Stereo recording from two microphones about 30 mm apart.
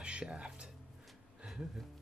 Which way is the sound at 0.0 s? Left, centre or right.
Right.